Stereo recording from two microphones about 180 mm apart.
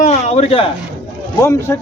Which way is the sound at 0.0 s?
35° left (ahead or behind).